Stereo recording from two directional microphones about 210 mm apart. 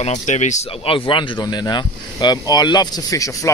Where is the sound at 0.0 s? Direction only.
35° left (ahead or behind).